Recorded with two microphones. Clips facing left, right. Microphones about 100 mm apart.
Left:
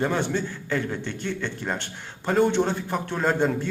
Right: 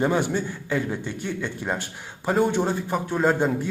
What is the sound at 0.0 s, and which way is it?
A man's voice, 10° right (ahead or behind).